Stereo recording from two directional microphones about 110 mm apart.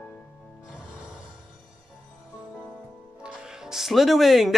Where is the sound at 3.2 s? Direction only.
10° right (ahead or behind).